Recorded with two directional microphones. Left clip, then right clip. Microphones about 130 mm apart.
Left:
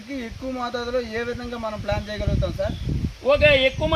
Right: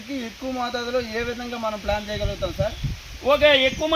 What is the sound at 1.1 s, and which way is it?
Speech, 15° left (ahead or behind).